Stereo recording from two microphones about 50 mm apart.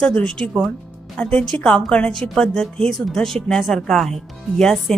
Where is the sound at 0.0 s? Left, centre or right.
Left.